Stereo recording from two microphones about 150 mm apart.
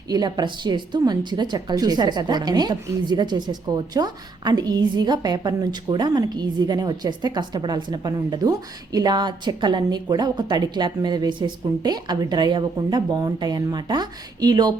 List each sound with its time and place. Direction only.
0.1 s a woman's voice: 30° right (ahead or behind)